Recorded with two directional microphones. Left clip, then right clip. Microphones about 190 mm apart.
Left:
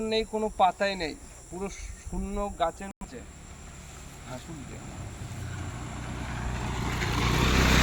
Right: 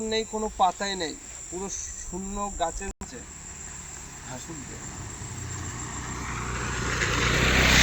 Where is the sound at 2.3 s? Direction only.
5° left (ahead or behind).